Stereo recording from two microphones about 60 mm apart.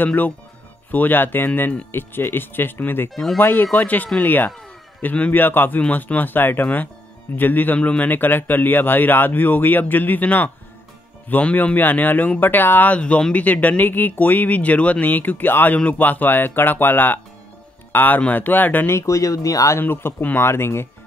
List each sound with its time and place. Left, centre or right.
0.0 s speech: left
5.8 s speech: left
12.9 s speech: left
18.9 s speech: left
19.8 s speech: left